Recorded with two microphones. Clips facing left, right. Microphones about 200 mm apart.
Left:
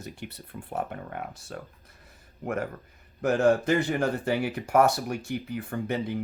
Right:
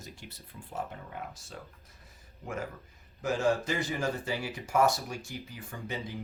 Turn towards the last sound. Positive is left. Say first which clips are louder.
# left 9 dB
turn(degrees=60)  # may be behind; listen again after turning